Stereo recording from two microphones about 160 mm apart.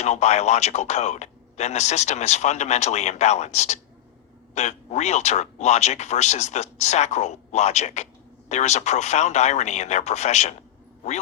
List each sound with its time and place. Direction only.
0.0 s speech: 45° left (ahead or behind)